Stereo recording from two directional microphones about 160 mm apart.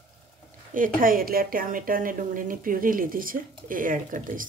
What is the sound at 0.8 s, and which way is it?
A woman's voice, 60° right (ahead or behind).